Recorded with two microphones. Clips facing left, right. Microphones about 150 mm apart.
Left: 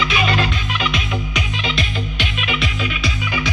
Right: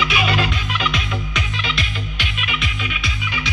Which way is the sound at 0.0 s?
10° right (ahead or behind).